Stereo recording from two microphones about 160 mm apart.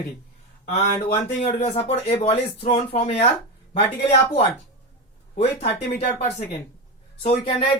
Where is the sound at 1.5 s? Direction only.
40° left (ahead or behind).